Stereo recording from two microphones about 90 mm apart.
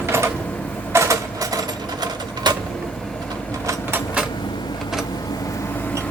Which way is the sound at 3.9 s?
15° right (ahead or behind).